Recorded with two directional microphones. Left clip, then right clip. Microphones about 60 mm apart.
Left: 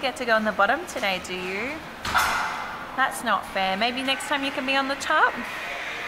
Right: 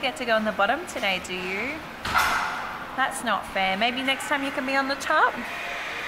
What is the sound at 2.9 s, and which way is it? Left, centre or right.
A woman's voice, left.